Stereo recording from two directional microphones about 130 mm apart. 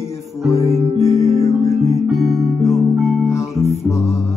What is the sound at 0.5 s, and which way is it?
Music, 25° right (ahead or behind).